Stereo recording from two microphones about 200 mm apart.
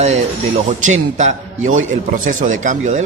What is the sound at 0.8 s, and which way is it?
Speech, 40° right (ahead or behind).